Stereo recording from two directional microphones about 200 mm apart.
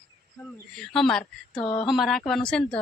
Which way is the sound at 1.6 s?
25° left (ahead or behind).